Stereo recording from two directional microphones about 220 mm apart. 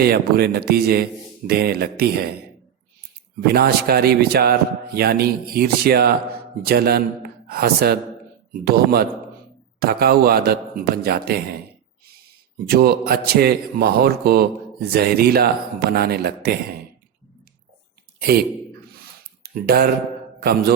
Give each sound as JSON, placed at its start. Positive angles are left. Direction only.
{"t": 0.0, "sound": "a man's voice", "side_deg": -45}
{"t": 3.4, "sound": "a man's voice", "side_deg": -45}
{"t": 12.6, "sound": "a man's voice", "side_deg": -45}
{"t": 18.2, "sound": "a man's voice", "side_deg": -45}